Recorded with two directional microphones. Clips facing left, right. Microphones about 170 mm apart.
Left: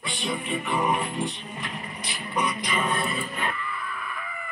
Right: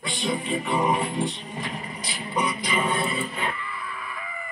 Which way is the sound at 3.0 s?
25° right (ahead or behind).